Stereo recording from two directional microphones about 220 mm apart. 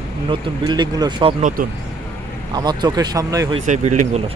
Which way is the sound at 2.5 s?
20° right (ahead or behind).